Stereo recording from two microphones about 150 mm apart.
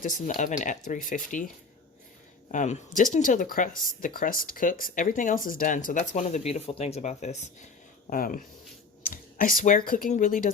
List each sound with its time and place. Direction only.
0.0 s speech: 60° left (ahead or behind)
2.5 s speech: 55° left (ahead or behind)
8.1 s speech: 70° left (ahead or behind)